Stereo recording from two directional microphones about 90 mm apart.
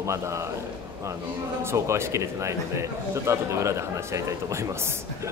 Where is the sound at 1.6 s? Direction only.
30° right (ahead or behind).